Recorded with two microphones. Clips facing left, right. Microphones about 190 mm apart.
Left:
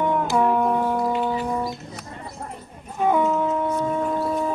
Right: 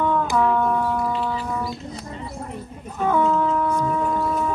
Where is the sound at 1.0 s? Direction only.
30° left (ahead or behind).